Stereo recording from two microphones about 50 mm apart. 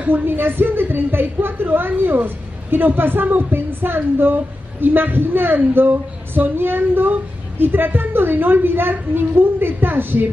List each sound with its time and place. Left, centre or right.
0.0 s a woman's voice: right